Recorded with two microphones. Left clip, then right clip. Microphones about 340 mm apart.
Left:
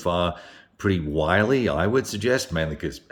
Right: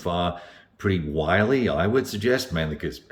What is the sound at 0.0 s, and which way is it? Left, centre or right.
Speech, centre.